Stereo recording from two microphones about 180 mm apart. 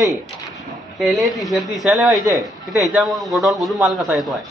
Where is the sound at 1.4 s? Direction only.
Centre (ahead or behind).